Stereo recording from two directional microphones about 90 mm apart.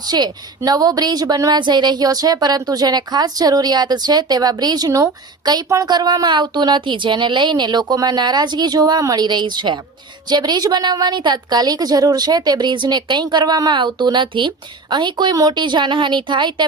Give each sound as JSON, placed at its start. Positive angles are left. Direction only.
{"t": 0.1, "sound": "a woman's voice", "side_deg": -50}
{"t": 5.9, "sound": "a woman's voice", "side_deg": -45}
{"t": 15.5, "sound": "speech", "side_deg": -60}